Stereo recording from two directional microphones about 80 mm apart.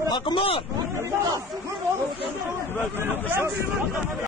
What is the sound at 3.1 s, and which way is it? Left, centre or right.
Speech, right.